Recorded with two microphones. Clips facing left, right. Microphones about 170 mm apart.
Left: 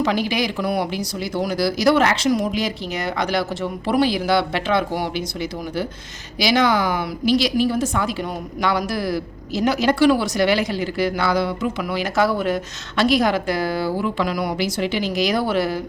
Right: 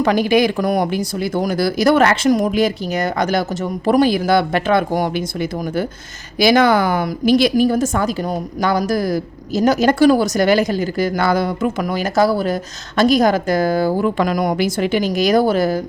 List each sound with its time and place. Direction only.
0.0 s a woman's voice: 50° right (ahead or behind)